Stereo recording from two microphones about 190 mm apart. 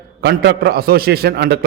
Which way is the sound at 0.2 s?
60° right (ahead or behind).